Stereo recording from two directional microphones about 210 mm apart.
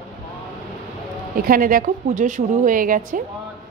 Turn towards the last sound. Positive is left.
turn(degrees=-40)  # may be behind; listen again after turning